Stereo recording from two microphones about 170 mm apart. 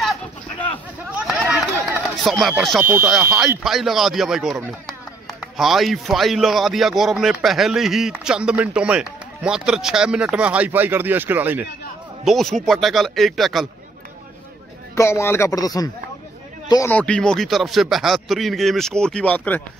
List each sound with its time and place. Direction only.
2.0 s a sound: centre (ahead or behind)
2.4 s speech: centre (ahead or behind)
2.8 s speech: 15° right (ahead or behind)
3.1 s speech: 5° right (ahead or behind)
12.3 s speech: centre (ahead or behind)
15.0 s speech: 15° left (ahead or behind)
16.9 s speech: 5° left (ahead or behind)